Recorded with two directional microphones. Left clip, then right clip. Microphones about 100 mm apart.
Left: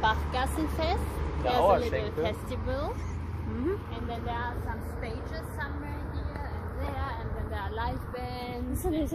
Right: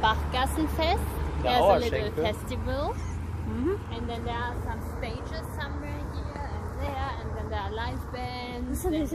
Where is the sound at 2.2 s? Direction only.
45° right (ahead or behind).